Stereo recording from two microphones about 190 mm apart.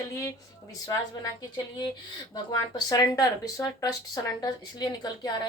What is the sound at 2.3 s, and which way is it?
Speech, 20° left (ahead or behind).